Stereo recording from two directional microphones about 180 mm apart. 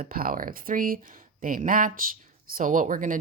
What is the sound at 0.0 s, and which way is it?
Speech, 50° right (ahead or behind).